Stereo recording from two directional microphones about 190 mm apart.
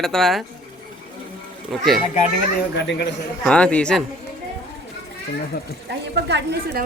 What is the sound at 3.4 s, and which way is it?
Speech, 5° left (ahead or behind).